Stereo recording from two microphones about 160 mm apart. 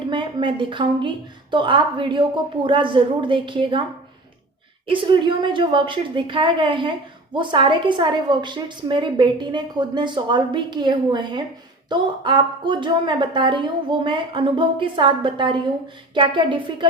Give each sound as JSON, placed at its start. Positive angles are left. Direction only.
{"t": 0.1, "sound": "a woman's voice", "side_deg": -30}
{"t": 4.9, "sound": "a woman's voice", "side_deg": -30}